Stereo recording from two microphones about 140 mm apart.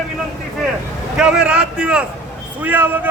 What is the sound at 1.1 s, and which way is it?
Speech, 5° right (ahead or behind).